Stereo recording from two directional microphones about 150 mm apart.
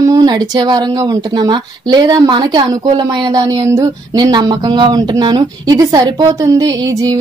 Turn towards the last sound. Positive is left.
turn(degrees=-25)  # may be behind; listen again after turning